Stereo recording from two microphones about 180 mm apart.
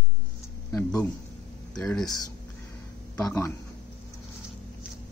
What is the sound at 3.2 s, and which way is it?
Speech, 15° left (ahead or behind).